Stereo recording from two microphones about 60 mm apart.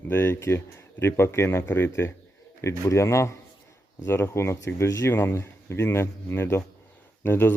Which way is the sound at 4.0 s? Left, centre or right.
Left.